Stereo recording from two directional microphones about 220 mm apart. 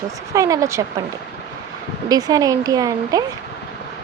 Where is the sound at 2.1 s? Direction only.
15° right (ahead or behind).